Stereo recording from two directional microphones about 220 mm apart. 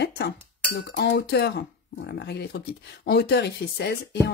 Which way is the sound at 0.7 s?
50° left (ahead or behind).